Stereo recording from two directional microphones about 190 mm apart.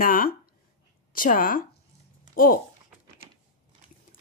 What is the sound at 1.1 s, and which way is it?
A woman's voice, 45° left (ahead or behind).